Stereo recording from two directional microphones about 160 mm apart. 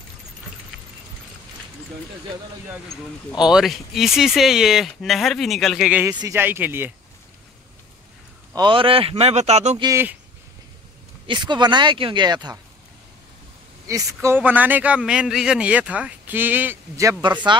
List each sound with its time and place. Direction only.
3.3 s speech: 5° right (ahead or behind)
5.9 s a man's voice: 10° right (ahead or behind)
8.5 s speech: 30° right (ahead or behind)
9.8 s a man's voice: 20° right (ahead or behind)
11.2 s speech: 30° right (ahead or behind)
13.8 s a man's voice: 20° right (ahead or behind)